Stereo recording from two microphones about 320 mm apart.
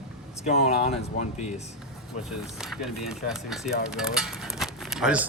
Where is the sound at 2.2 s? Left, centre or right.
Centre.